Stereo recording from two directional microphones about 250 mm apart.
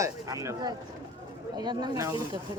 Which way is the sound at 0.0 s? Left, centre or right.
Centre.